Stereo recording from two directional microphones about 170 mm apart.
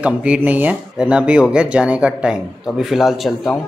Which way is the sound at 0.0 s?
5° right (ahead or behind).